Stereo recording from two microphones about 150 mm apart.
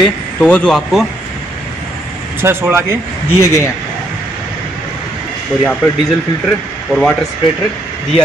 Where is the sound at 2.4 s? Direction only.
15° right (ahead or behind).